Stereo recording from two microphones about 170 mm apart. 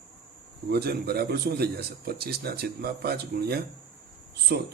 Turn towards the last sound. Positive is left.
turn(degrees=-75)  # may be behind; listen again after turning